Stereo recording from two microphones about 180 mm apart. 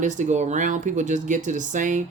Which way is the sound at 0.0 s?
45° right (ahead or behind).